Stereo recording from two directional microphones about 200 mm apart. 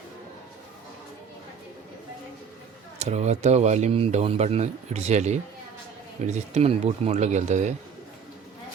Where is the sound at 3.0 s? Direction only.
35° right (ahead or behind).